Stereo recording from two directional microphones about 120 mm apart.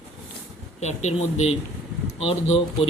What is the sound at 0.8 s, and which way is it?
Speech, 70° left (ahead or behind).